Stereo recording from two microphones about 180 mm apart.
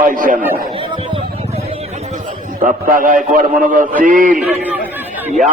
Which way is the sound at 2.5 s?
50° right (ahead or behind).